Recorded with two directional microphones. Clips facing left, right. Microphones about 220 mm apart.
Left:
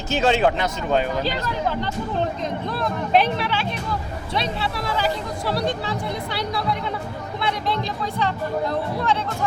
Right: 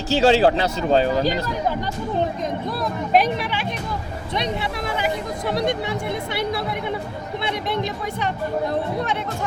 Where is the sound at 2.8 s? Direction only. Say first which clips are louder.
Even; 10° right (ahead or behind).